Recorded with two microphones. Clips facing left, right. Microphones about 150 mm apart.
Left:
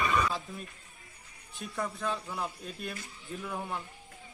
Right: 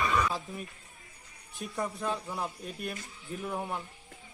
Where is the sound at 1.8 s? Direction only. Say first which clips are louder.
Right 1 dB; 10° right (ahead or behind).